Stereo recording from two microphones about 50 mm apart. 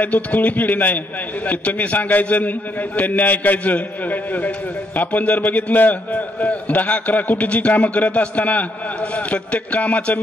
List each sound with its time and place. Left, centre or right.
0.0 s a man's voice: left